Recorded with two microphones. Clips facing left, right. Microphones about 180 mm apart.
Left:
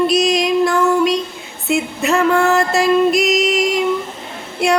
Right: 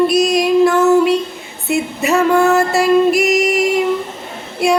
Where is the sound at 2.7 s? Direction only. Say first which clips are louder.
Right 2 dB; 5° right (ahead or behind).